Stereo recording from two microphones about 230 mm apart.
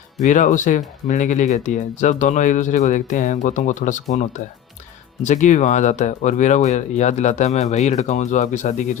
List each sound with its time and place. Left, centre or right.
0.2 s speech: left